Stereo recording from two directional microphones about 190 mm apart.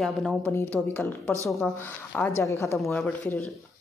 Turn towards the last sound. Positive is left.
turn(degrees=10)  # may be behind; listen again after turning